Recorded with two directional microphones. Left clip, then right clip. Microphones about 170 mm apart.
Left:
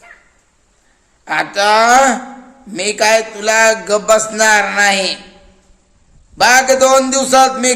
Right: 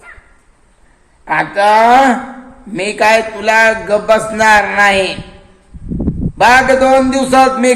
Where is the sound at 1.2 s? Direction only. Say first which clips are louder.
Right 2 dB; 10° left (ahead or behind).